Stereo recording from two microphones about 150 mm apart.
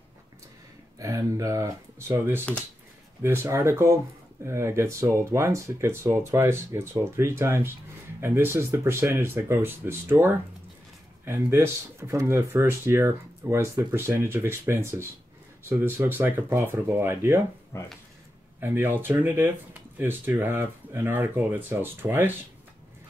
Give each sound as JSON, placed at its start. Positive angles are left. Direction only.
{"t": 0.9, "sound": "speech", "side_deg": -20}
{"t": 17.7, "sound": "speech", "side_deg": 15}
{"t": 18.6, "sound": "speech", "side_deg": -15}